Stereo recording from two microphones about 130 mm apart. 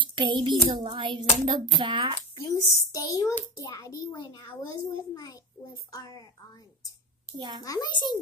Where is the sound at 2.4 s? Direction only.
25° left (ahead or behind).